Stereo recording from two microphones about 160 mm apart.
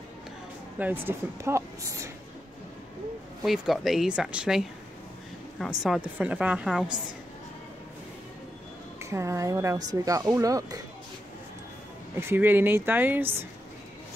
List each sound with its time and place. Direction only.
0.7 s speech: 10° right (ahead or behind)
3.4 s a woman's voice: centre (ahead or behind)
9.0 s speech: 20° right (ahead or behind)
12.2 s speech: 15° right (ahead or behind)